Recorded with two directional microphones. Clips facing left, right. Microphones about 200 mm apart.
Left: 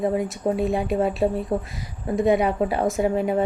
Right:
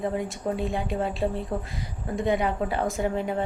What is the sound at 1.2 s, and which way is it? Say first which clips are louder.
Speech: left 4 dB; 30° left (ahead or behind).